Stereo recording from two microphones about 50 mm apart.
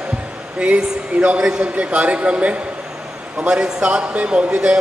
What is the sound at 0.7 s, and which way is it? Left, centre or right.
Speech, right.